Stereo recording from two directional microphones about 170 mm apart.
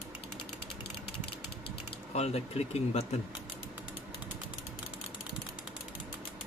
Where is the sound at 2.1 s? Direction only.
35° left (ahead or behind).